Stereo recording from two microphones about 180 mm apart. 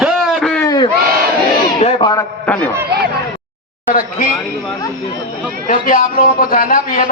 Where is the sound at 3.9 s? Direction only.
50° left (ahead or behind).